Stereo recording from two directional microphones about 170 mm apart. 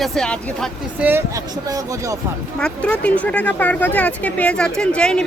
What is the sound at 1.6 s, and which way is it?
Speech, 20° right (ahead or behind).